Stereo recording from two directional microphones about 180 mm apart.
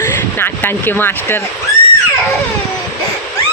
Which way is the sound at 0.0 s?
10° left (ahead or behind).